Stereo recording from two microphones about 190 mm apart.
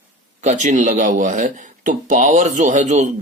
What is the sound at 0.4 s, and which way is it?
Speech, 40° right (ahead or behind).